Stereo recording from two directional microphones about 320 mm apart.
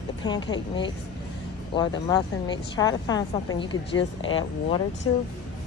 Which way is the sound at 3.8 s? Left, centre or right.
Left.